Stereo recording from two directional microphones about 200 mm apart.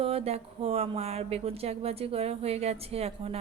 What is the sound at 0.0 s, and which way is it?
Speech, 30° right (ahead or behind).